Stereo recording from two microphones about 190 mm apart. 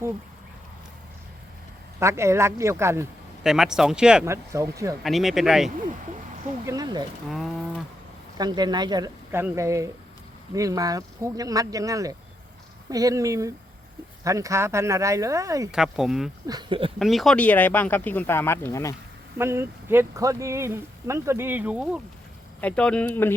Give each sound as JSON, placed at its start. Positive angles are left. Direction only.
{"t": 2.0, "sound": "speech", "side_deg": -15}
{"t": 3.4, "sound": "speech", "side_deg": -5}
{"t": 5.0, "sound": "speech", "side_deg": 0}
{"t": 6.7, "sound": "a sound", "side_deg": -20}
{"t": 7.3, "sound": "speech", "side_deg": 0}
{"t": 8.4, "sound": "speech", "side_deg": -20}
{"t": 15.7, "sound": "speech", "side_deg": -5}
{"t": 16.5, "sound": "speech", "side_deg": -25}
{"t": 17.0, "sound": "speech", "side_deg": 0}
{"t": 19.4, "sound": "speech", "side_deg": -15}
{"t": 22.6, "sound": "speech", "side_deg": 5}